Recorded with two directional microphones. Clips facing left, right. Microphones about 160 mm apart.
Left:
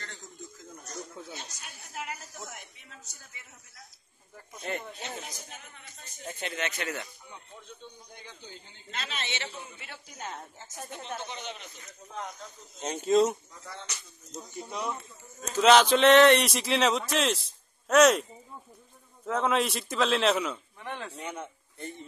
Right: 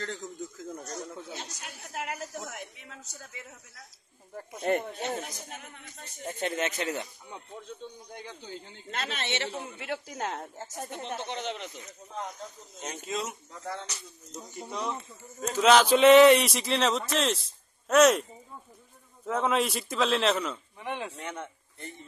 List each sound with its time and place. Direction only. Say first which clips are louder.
1.6 s a sound: right 3 dB; 60° right (ahead or behind)
4.4 s speech: right 8 dB; 50° right (ahead or behind)
6.8 s speech: right 3 dB; 25° right (ahead or behind)
8.9 s a man's voice: right 4 dB; 55° right (ahead or behind); by 10.4 s 80° right
10.9 s speech: right 1 dB; 20° right (ahead or behind)
11.2 s speech: right 6 dB; 85° right
12.8 s speech: left 11 dB; 30° left (ahead or behind)
14.7 s speech: right 1 dB; 10° left (ahead or behind)
15.5 s speech: even; centre (ahead or behind)
19.2 s speech: even; centre (ahead or behind)
20.8 s speech: right 4 dB; 15° right (ahead or behind)
21.1 s speech: even; 10° left (ahead or behind)